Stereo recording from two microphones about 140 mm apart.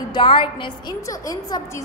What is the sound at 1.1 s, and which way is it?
Speech, 25° left (ahead or behind).